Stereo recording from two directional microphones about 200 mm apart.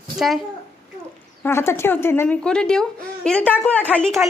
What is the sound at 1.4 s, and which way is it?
A woman's voice, 10° left (ahead or behind).